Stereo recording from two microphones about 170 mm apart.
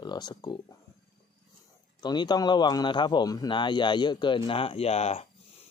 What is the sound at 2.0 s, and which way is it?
Speech, 25° left (ahead or behind).